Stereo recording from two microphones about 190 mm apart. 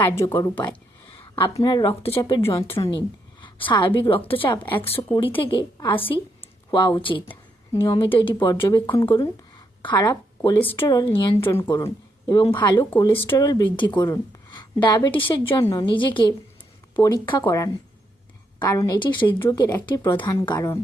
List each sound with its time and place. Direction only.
0.0 s a woman's voice: 15° left (ahead or behind)
1.1 s a woman's voice: 30° left (ahead or behind)